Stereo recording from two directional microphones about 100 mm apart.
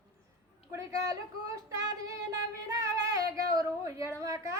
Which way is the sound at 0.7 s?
30° right (ahead or behind).